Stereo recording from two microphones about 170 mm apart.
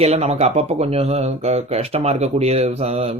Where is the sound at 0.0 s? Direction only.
40° right (ahead or behind).